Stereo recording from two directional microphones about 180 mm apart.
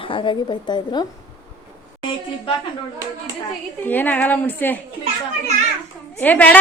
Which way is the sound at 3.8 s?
10° left (ahead or behind).